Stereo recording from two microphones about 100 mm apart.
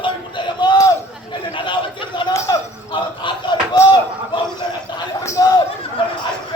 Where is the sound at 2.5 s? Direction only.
45° left (ahead or behind).